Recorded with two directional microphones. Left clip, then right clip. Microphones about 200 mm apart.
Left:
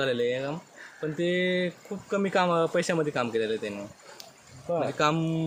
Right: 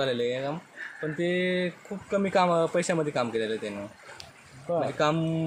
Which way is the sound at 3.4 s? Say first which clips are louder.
Left 1 dB; 5° left (ahead or behind).